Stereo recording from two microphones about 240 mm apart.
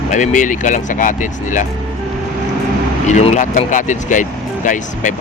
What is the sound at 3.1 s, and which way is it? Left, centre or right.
Speech, left.